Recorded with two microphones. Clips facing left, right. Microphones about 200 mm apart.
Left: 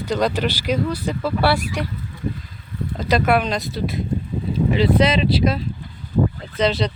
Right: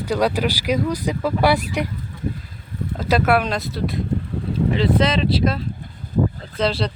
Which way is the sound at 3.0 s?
5° right (ahead or behind).